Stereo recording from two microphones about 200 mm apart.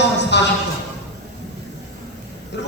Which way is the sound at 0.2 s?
60° left (ahead or behind).